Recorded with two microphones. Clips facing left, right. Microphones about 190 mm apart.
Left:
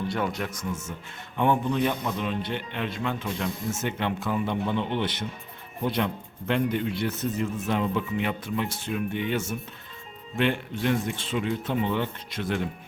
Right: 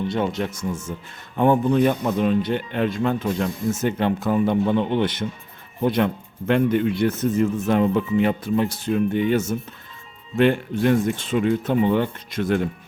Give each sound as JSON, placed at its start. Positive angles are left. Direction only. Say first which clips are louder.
{"t": 0.1, "sound": "speech", "louder": "right 5 dB", "side_deg": -25}
{"t": 1.4, "sound": "speech", "louder": "right 6 dB", "side_deg": -45}